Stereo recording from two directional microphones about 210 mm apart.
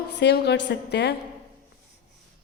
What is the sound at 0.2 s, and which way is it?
Speech, 55° left (ahead or behind).